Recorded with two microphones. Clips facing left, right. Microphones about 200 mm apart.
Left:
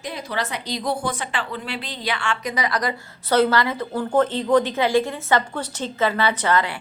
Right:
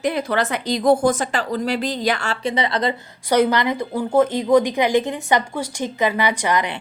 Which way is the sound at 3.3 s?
15° right (ahead or behind).